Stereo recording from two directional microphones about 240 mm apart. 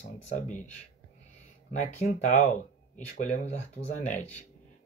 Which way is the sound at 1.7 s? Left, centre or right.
Left.